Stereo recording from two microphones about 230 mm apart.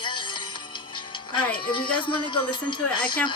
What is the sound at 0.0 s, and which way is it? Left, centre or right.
Music, left.